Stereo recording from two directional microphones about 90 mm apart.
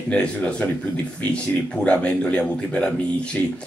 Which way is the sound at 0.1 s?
10° left (ahead or behind).